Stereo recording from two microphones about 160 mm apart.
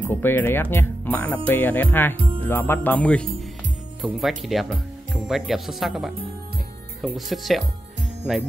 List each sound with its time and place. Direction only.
0.0 s speech: 10° left (ahead or behind)
2.1 s music: 35° right (ahead or behind)
2.4 s speech: 10° left (ahead or behind)